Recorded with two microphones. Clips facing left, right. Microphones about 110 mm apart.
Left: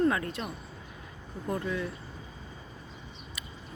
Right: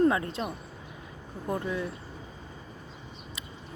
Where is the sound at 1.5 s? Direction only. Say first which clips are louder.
Right 1 dB; 15° right (ahead or behind).